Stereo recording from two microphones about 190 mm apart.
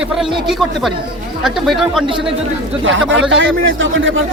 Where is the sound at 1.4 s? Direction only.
Centre (ahead or behind).